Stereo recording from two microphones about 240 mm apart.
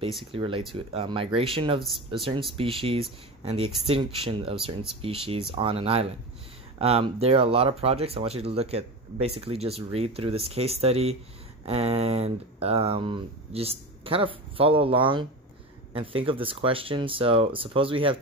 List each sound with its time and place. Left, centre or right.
0.2 s speech: right
1.8 s speech: centre
2.5 s speech: right